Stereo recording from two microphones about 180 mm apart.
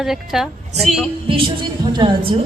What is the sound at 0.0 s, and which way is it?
Speech, centre (ahead or behind).